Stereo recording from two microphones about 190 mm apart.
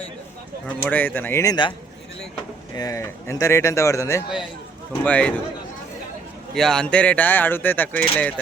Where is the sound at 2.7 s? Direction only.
15° left (ahead or behind).